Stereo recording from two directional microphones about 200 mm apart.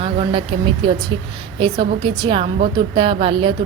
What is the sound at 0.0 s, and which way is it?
A woman's voice, 25° right (ahead or behind).